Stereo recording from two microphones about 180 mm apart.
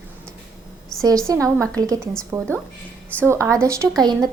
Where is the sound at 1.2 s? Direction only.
15° right (ahead or behind).